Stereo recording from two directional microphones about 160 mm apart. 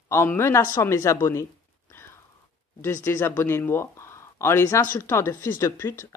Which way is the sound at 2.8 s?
15° left (ahead or behind).